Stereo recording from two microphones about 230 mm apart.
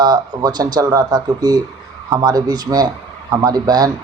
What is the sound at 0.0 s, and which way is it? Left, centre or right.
Speech, centre.